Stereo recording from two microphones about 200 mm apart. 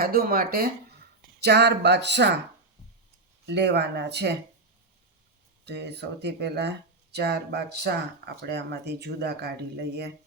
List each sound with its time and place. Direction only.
0.0 s speech: 50° right (ahead or behind)
3.4 s speech: 60° right (ahead or behind)
5.6 s speech: 55° right (ahead or behind)